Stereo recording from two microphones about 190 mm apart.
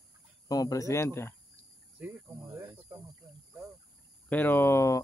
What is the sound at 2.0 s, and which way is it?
Speech, 10° right (ahead or behind).